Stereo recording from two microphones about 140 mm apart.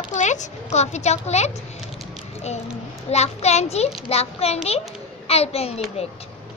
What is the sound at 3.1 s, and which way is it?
A child's voice, 50° left (ahead or behind).